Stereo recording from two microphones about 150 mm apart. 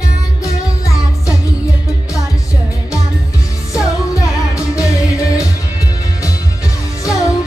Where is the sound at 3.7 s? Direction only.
20° left (ahead or behind).